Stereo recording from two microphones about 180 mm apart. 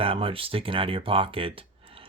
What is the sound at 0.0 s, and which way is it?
Speech, 30° right (ahead or behind).